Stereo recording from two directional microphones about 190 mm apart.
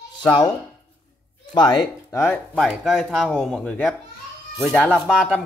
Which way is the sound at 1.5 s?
20° left (ahead or behind).